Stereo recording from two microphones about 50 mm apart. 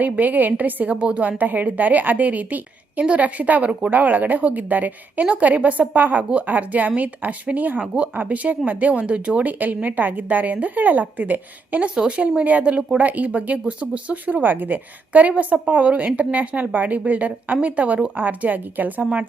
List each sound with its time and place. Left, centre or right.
0.0 s a woman's voice: right